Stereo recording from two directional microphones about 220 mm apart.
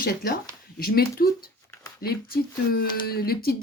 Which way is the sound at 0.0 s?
45° left (ahead or behind).